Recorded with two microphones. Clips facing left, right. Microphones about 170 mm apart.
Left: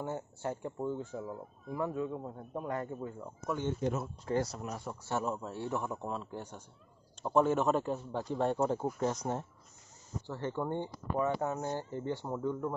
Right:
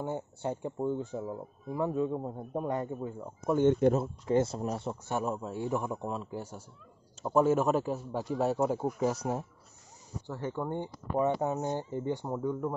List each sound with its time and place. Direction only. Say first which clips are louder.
0.0 s speech: right 3 dB; 20° right (ahead or behind)
3.5 s speech: right 11 dB; 60° right (ahead or behind)
4.3 s speech: right 5 dB; 25° right (ahead or behind); by 10.8 s 5° right (ahead or behind)
10.8 s speech: right 3 dB; 20° right (ahead or behind)